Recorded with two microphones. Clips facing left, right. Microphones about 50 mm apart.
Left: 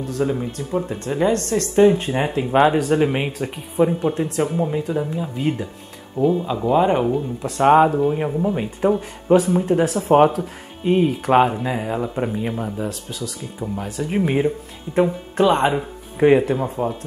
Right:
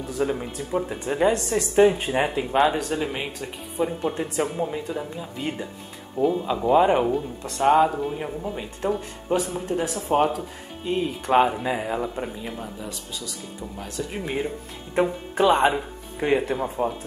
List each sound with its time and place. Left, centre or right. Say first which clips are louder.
0.1 s speech: left 3 dB; centre
2.5 s speech: left 7 dB; centre
4.0 s speech: left 4 dB; centre
7.6 s speech: left 5 dB; left
11.2 s speech: left 2 dB; centre
11.5 s speech: left 2 dB; centre
12.4 s speech: left 9 dB; left
14.0 s speech: left 9 dB; left
15.0 s speech: left 4 dB; centre
16.2 s speech: left 8 dB; centre
16.4 s speech: left 3 dB; centre